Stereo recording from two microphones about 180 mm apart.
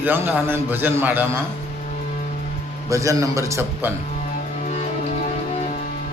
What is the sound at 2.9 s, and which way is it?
Speech, 15° right (ahead or behind).